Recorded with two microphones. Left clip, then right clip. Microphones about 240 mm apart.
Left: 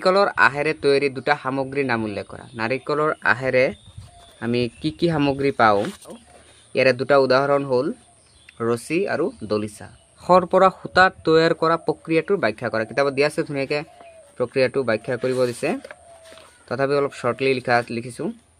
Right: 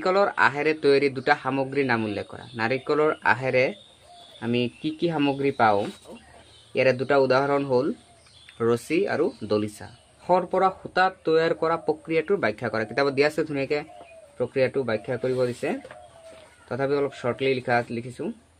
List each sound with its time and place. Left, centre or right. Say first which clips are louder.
0.0 s speech: left 4 dB; left
10.2 s speech: left 6 dB; left